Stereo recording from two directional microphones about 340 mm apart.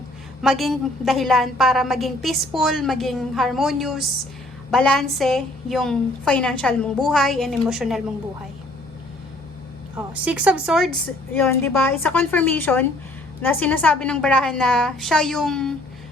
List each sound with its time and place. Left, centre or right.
0.4 s a woman's voice: centre
9.9 s a woman's voice: centre